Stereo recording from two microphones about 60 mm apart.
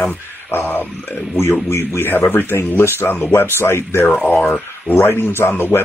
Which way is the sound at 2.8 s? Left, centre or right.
Left.